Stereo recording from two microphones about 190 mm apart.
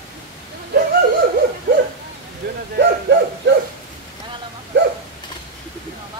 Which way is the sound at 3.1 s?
60° right (ahead or behind).